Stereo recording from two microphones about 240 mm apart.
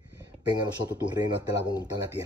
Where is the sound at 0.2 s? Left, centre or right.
Centre.